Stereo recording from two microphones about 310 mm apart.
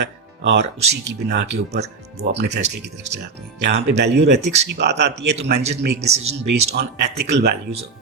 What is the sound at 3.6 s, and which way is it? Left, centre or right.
Speech, right.